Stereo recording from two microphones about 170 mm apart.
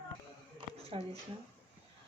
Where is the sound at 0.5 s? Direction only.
35° right (ahead or behind).